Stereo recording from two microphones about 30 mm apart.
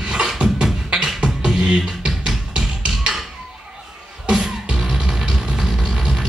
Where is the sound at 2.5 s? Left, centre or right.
Right.